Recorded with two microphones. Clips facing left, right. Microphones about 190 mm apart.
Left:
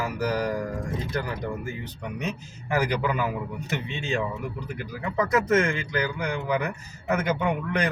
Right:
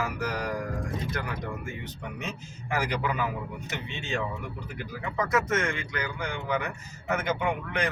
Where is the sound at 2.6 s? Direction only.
35° left (ahead or behind).